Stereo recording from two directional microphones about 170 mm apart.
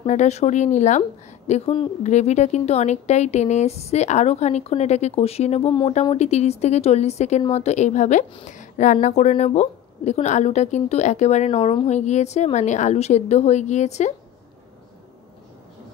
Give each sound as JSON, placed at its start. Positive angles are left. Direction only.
{"t": 0.0, "sound": "speech", "side_deg": 45}
{"t": 1.5, "sound": "a woman's voice", "side_deg": 30}
{"t": 2.0, "sound": "a woman's voice", "side_deg": 40}
{"t": 5.7, "sound": "speech", "side_deg": 25}
{"t": 6.1, "sound": "a woman's voice", "side_deg": 40}